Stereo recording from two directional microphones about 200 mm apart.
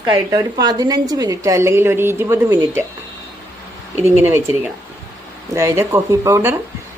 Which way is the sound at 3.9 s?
10° right (ahead or behind).